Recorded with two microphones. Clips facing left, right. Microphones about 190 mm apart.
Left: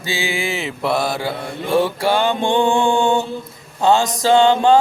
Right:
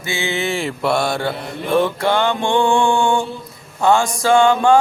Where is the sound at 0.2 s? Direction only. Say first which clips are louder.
Right 3 dB; 10° left (ahead or behind).